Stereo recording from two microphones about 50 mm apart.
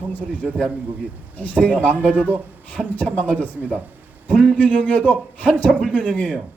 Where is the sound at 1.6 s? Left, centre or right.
Left.